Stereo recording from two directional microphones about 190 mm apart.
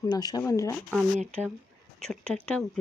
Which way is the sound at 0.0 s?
20° left (ahead or behind).